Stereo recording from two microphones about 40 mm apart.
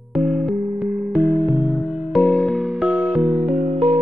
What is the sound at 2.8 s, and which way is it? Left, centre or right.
Music, right.